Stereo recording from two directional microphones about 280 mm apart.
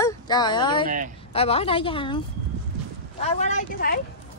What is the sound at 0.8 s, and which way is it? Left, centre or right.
Speech, right.